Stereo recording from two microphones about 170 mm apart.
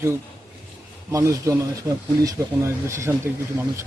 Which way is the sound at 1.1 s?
20° right (ahead or behind).